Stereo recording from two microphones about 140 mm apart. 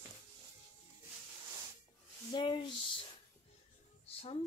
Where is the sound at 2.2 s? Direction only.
35° left (ahead or behind).